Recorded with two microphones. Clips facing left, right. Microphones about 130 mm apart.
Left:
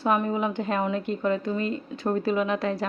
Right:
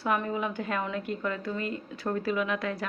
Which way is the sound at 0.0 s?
25° left (ahead or behind).